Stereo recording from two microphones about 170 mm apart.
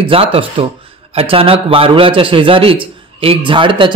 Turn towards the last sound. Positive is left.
turn(degrees=-30)  # may be behind; listen again after turning